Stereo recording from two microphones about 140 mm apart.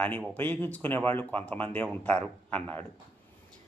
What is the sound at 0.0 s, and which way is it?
Speech, 10° left (ahead or behind).